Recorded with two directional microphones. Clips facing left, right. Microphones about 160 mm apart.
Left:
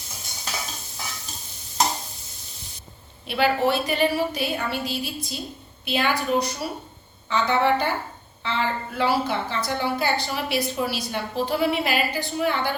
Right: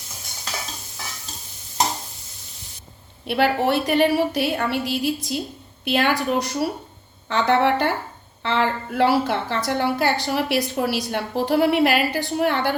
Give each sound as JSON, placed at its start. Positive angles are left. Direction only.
{"t": 3.2, "sound": "a woman's voice", "side_deg": -65}